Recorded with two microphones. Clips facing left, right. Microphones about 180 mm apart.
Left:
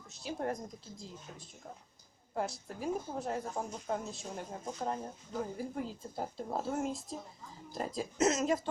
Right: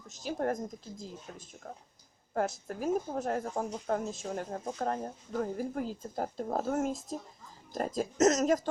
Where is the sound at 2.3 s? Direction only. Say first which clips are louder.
Right 5 dB; 50° right (ahead or behind).